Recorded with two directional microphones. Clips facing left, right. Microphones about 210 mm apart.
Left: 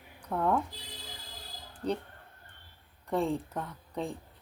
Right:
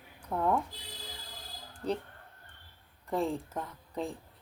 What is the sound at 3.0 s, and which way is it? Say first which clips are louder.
Speech: left 2 dB; 5° right (ahead or behind).